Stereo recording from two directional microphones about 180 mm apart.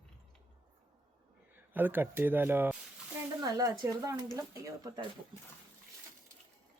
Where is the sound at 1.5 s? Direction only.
10° right (ahead or behind).